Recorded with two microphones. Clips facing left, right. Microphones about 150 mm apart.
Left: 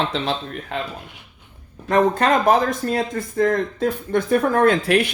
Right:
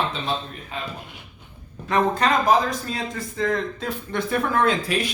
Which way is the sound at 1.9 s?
45° left (ahead or behind).